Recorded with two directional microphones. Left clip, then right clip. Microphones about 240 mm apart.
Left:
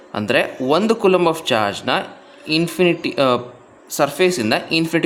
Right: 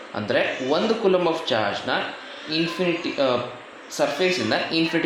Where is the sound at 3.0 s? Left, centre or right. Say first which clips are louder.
Left 5 dB; left.